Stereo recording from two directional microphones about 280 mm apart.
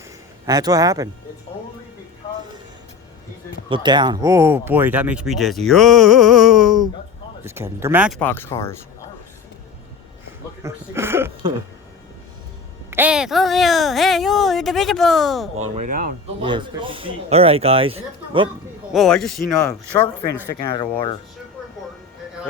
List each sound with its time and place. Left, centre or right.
0.4 s speech: centre
3.7 s speech: centre
8.2 s speech: centre
10.6 s speech: centre
12.9 s speech: centre
15.7 s speech: right
16.4 s speech: centre
18.9 s speech: centre